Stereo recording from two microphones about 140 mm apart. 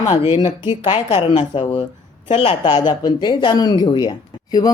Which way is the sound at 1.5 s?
35° left (ahead or behind).